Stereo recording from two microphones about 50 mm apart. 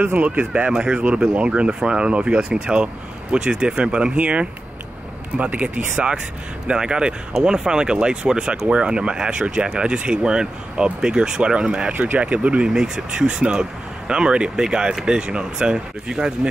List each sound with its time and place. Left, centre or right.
0.2 s speech: right
0.7 s speech: centre